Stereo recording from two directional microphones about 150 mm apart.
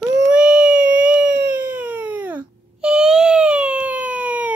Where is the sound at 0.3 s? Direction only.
10° right (ahead or behind).